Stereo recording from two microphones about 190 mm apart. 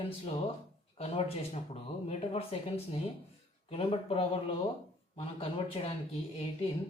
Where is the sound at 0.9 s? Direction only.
30° left (ahead or behind).